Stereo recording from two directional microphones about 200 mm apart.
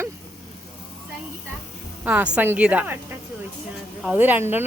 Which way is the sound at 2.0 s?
5° right (ahead or behind).